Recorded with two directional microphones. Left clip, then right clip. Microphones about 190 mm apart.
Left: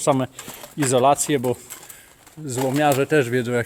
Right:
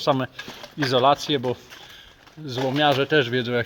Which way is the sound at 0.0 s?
30° left (ahead or behind).